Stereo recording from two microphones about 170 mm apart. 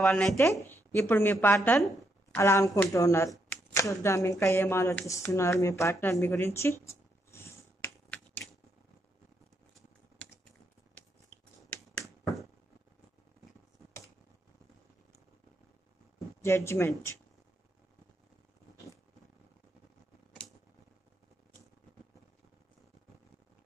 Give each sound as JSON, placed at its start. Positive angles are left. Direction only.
{"t": 0.0, "sound": "speech", "side_deg": 0}
{"t": 0.4, "sound": "speech", "side_deg": 15}
{"t": 7.8, "sound": "finger snapping", "side_deg": 10}
{"t": 16.3, "sound": "speech", "side_deg": 15}